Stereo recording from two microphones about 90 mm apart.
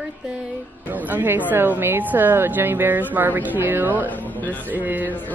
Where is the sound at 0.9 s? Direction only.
20° right (ahead or behind).